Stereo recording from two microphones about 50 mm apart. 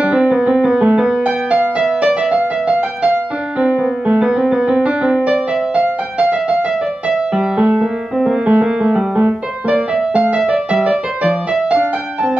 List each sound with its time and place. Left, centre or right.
0.0 s music: right
3.5 s music: right